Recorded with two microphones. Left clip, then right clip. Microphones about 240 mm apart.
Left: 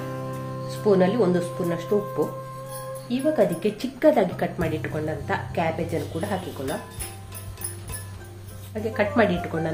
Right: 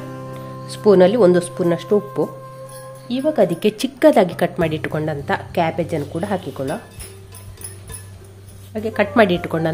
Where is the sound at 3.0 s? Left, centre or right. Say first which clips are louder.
Right 5 dB; right.